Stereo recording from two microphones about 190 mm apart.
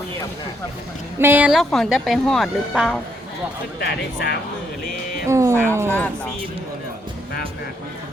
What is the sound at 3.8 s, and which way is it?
Speech, 60° left (ahead or behind).